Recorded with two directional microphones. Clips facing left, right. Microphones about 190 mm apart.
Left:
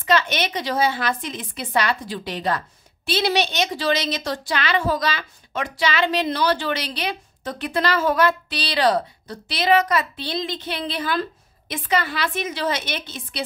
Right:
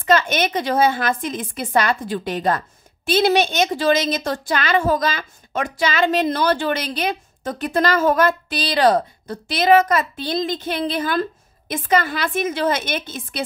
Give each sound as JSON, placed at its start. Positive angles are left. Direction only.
{"t": 0.0, "sound": "a woman's voice", "side_deg": -50}